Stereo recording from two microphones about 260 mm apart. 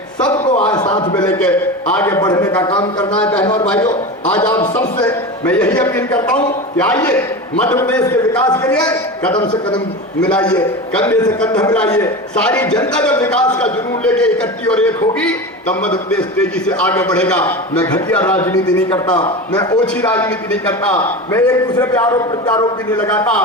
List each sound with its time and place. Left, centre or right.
0.3 s a sound: centre
0.9 s a man's voice: centre
1.2 s a man's voice: centre
3.1 s a man's voice: centre
3.4 s a man's voice: centre
5.5 s a man's voice: centre
9.3 s a man's voice: centre
9.7 s a man's voice: centre
12.6 s a man's voice: centre
12.9 s a man's voice: centre
19.7 s a man's voice: centre
23.0 s a man's voice: centre